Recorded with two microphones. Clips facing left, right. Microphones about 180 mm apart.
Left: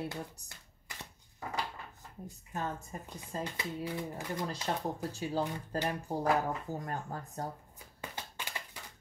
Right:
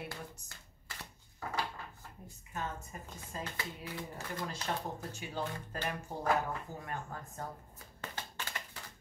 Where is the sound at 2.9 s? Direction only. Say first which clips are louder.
Left 4 dB; 30° left (ahead or behind).